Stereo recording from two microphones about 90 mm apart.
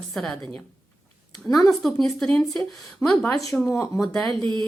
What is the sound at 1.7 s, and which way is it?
Speech, 5° left (ahead or behind).